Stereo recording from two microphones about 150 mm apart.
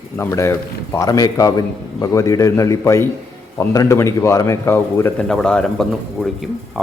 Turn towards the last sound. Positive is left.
turn(degrees=0)  # may be behind; listen again after turning